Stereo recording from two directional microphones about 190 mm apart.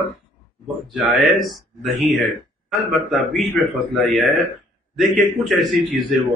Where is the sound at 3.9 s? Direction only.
Centre (ahead or behind).